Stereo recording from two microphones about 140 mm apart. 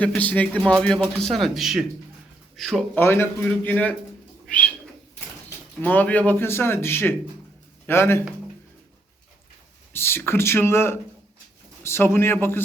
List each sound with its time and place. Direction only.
0.2 s a man's voice: 10° left (ahead or behind)
2.9 s speech: 15° left (ahead or behind)
4.4 s bird: 10° left (ahead or behind)
5.8 s speech: 10° left (ahead or behind)
9.9 s speech: 15° left (ahead or behind)